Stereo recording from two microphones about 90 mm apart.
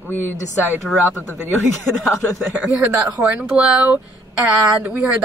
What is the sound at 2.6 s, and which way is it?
A woman's voice, 15° right (ahead or behind).